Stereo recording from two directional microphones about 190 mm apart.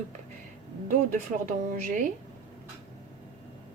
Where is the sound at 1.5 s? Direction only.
40° right (ahead or behind).